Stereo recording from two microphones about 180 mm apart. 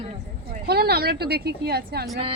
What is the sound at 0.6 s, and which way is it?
Speech, 60° right (ahead or behind).